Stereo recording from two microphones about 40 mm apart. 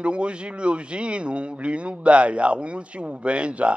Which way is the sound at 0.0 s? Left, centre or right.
Right.